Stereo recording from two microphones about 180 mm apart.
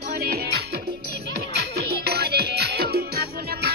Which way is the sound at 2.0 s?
65° right (ahead or behind).